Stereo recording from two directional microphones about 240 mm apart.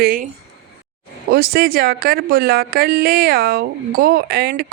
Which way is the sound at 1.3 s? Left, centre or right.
Right.